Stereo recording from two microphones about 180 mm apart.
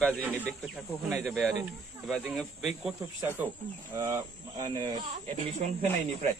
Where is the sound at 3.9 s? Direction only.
20° right (ahead or behind).